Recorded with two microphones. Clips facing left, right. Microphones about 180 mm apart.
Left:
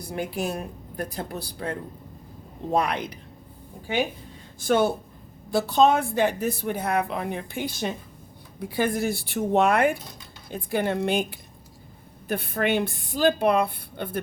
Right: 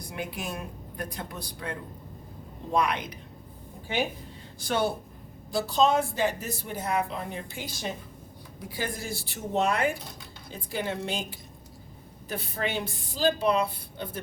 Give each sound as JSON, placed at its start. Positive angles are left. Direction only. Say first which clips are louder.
{"t": 0.1, "sound": "a woman's voice", "louder": "left 7 dB", "side_deg": 40}
{"t": 4.6, "sound": "speech", "louder": "left 6 dB", "side_deg": 50}